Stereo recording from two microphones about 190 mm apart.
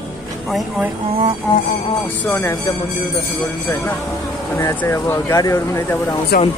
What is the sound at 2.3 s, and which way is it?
Speech, 10° left (ahead or behind).